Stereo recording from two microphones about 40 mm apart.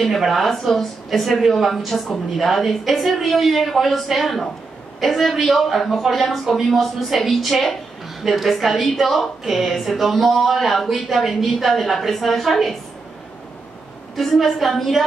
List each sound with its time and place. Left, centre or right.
0.0 s speech: centre
14.1 s speech: centre